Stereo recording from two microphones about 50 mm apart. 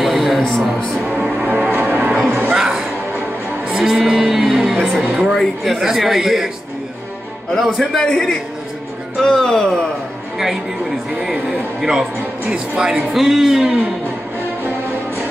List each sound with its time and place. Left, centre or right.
0.0 s music: centre
1.7 s music: right
2.3 s music: centre
5.2 s speech: centre
7.5 s speech: centre
8.0 s speech: centre
11.1 s speech: centre